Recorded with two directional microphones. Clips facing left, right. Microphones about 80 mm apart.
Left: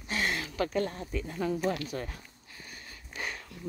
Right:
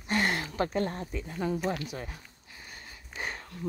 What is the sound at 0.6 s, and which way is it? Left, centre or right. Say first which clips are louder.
Speech: left 1 dB; right.